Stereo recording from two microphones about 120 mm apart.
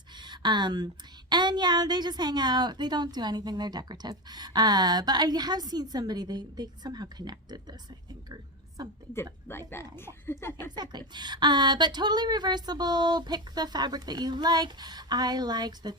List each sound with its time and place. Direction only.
0.1 s a sound: 40° right (ahead or behind)
1.3 s a woman's voice: 40° right (ahead or behind)
9.5 s speech: 20° left (ahead or behind)
10.8 s a woman's voice: 35° right (ahead or behind)